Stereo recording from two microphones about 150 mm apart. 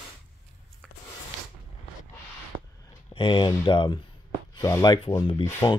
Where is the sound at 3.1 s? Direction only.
35° left (ahead or behind).